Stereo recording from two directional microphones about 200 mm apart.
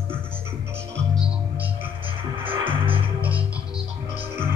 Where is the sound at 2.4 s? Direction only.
25° right (ahead or behind).